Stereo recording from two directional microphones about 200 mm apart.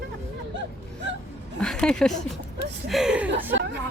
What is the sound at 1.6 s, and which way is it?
Speech, 5° left (ahead or behind).